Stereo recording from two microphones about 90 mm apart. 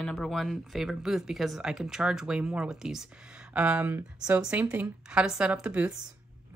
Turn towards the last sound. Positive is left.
turn(degrees=-15)  # may be behind; listen again after turning